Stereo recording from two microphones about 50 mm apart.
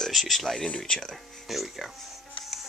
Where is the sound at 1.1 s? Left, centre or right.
Centre.